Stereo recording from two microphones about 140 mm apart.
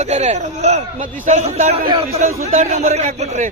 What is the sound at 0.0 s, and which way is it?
A man's voice, 50° right (ahead or behind).